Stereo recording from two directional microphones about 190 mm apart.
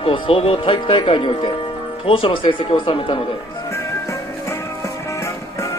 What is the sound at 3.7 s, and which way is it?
Music, 15° left (ahead or behind).